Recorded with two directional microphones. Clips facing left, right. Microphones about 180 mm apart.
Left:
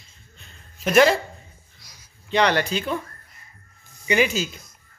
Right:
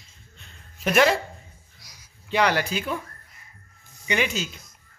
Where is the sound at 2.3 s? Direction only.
5° right (ahead or behind).